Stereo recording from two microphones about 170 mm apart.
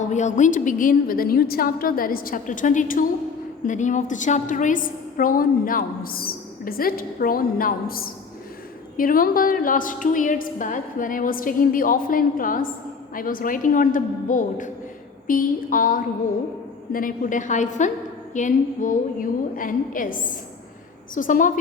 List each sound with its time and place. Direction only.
0.1 s a woman's voice: 45° left (ahead or behind)